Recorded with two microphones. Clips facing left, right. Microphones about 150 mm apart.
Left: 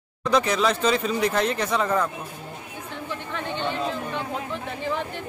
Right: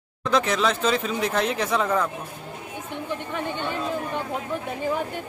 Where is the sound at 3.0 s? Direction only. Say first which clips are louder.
Right 2 dB; 15° right (ahead or behind).